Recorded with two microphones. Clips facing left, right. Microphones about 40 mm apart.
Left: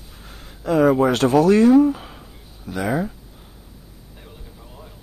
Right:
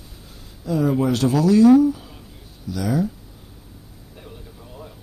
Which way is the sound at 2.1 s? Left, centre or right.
Left.